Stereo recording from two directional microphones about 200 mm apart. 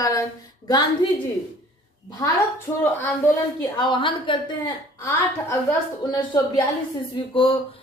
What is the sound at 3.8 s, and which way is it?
A woman's voice, 25° left (ahead or behind).